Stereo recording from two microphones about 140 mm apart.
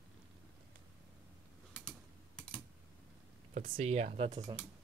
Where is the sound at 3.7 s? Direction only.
50° right (ahead or behind).